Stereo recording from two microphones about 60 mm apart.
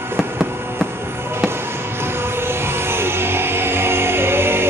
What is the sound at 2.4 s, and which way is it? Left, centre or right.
Music, right.